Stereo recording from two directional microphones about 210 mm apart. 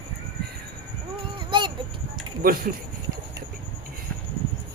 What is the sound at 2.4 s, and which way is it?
Speech, 45° right (ahead or behind).